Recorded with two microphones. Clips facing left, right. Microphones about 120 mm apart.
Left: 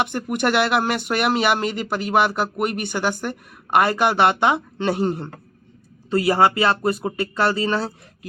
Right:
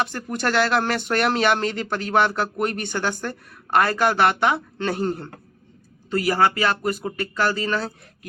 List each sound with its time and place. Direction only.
0.0 s speech: 20° left (ahead or behind)